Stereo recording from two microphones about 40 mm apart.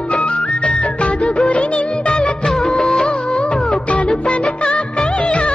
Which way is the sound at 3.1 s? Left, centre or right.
Left.